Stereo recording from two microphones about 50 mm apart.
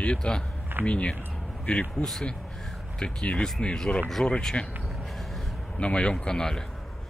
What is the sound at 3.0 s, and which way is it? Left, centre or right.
Speech, centre.